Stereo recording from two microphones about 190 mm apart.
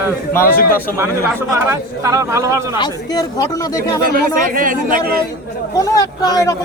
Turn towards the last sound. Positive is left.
turn(degrees=20)  # may be behind; listen again after turning